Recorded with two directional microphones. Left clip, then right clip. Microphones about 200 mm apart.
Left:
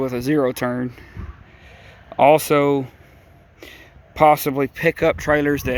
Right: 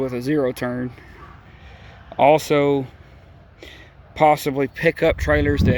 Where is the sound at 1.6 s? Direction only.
25° left (ahead or behind).